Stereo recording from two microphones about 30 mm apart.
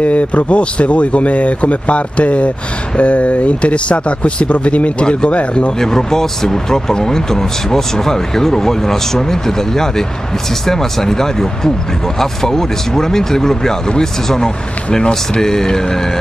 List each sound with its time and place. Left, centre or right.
0.0 s speech: left
5.8 s speech: centre